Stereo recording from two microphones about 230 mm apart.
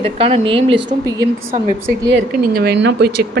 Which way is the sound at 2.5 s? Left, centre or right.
Right.